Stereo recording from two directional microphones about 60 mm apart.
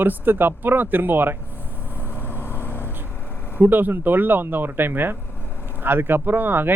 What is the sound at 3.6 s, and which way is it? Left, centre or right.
Speech, right.